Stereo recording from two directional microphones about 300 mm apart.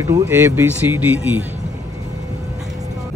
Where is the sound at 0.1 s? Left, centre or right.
Centre.